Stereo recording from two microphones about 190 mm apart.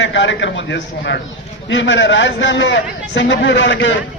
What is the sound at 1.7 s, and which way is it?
A man's voice, 80° left.